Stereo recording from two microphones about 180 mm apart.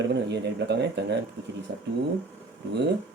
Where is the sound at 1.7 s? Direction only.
65° right (ahead or behind).